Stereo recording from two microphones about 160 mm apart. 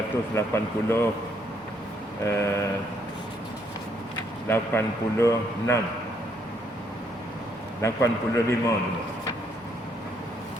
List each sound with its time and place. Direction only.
0.3 s a man's voice: 15° left (ahead or behind)
2.2 s a man's voice: 20° left (ahead or behind)
4.4 s a man's voice: 15° left (ahead or behind)
7.8 s a man's voice: 20° left (ahead or behind)